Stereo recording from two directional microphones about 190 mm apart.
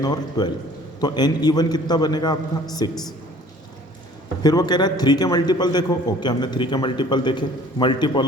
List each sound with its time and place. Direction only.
0.0 s a man's voice: 20° left (ahead or behind)
4.4 s a man's voice: 20° left (ahead or behind)